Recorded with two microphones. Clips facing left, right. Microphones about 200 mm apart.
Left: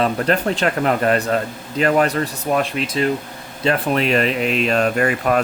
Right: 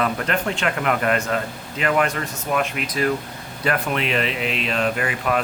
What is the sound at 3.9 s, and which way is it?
Speech, 40° left (ahead or behind).